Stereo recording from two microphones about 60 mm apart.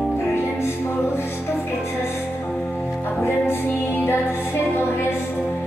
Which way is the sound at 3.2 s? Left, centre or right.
Left.